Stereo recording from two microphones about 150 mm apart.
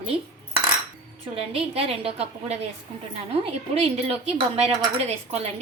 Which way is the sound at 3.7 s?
40° right (ahead or behind).